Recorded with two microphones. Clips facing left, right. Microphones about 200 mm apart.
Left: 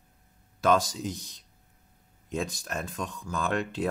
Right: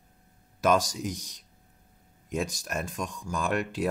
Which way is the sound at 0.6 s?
15° right (ahead or behind).